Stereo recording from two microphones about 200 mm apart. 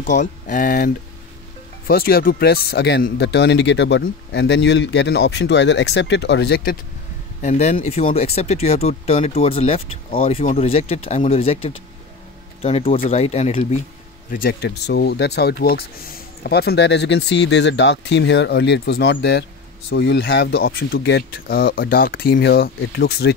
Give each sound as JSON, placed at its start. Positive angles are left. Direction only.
{"t": 0.0, "sound": "speech", "side_deg": 40}
{"t": 7.4, "sound": "speech", "side_deg": 35}
{"t": 14.3, "sound": "speech", "side_deg": 50}